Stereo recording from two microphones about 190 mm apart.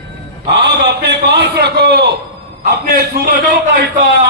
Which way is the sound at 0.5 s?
65° right (ahead or behind).